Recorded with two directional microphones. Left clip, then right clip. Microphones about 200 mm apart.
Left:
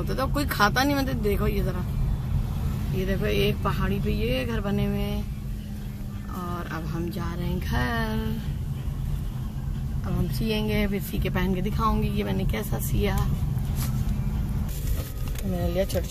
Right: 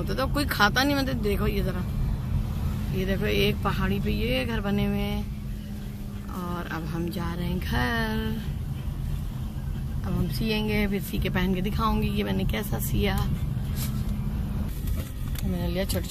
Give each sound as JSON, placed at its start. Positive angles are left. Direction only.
{"t": 0.0, "sound": "speech", "side_deg": 5}
{"t": 3.0, "sound": "speech", "side_deg": 0}
{"t": 6.4, "sound": "speech", "side_deg": -5}
{"t": 10.0, "sound": "a woman's voice", "side_deg": -10}
{"t": 10.6, "sound": "speech", "side_deg": 0}
{"t": 15.6, "sound": "speech", "side_deg": 5}